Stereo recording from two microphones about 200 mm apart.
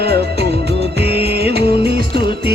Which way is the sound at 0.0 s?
55° right (ahead or behind).